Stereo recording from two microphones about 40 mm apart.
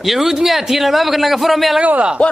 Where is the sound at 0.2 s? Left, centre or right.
Centre.